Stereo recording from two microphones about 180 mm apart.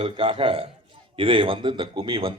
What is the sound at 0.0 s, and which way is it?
A man's voice, 30° right (ahead or behind).